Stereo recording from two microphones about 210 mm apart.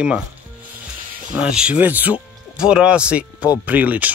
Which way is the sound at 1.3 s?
5° right (ahead or behind).